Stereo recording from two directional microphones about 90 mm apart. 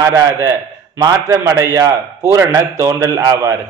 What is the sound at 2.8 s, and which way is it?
Speech, 35° right (ahead or behind).